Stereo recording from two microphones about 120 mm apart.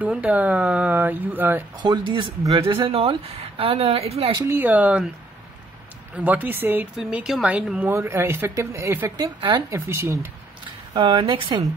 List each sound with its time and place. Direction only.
0.0 s speech: 10° right (ahead or behind)
1.8 s speech: 40° right (ahead or behind)
2.6 s speech: 50° right (ahead or behind)
4.5 s speech: 15° right (ahead or behind)
6.1 s speech: 15° right (ahead or behind)
7.0 s speech: 5° right (ahead or behind)
7.9 s speech: 20° right (ahead or behind)
9.1 s speech: 35° right (ahead or behind)
9.7 s speech: 20° right (ahead or behind)
11.0 s speech: 45° right (ahead or behind)